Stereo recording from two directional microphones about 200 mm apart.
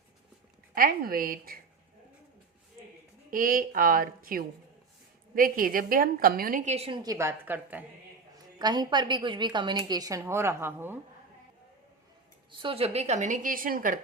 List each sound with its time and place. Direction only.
0.7 s a woman's voice: 45° right (ahead or behind)
3.2 s a woman's voice: 45° right (ahead or behind)
7.0 s a woman's voice: 15° right (ahead or behind)
8.5 s a woman's voice: 20° right (ahead or behind)
12.5 s a woman's voice: 25° right (ahead or behind); by 14.0 s 45° right (ahead or behind)